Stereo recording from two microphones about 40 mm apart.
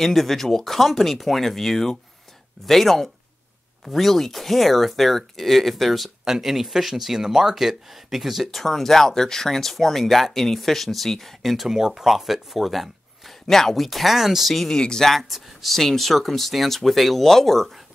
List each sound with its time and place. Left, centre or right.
0.0 s speech: centre
8.5 s speech: centre
11.6 s speech: centre
13.8 s speech: centre
14.5 s speech: centre
15.0 s speech: centre